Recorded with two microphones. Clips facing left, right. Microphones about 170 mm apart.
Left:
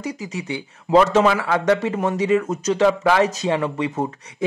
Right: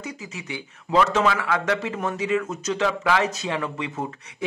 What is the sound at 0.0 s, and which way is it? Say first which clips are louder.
Speech: left 7 dB; 35° left (ahead or behind).